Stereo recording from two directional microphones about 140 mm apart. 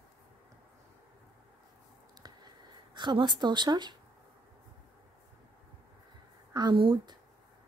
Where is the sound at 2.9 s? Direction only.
35° right (ahead or behind).